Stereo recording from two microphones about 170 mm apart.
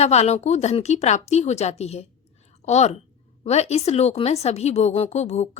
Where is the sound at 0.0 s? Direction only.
40° left (ahead or behind).